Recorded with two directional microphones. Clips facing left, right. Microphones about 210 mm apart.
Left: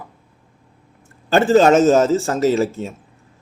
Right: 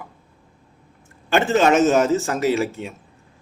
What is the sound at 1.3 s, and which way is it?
A man's voice, 35° left (ahead or behind).